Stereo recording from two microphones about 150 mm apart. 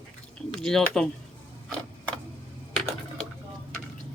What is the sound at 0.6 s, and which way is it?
Speech, 5° left (ahead or behind).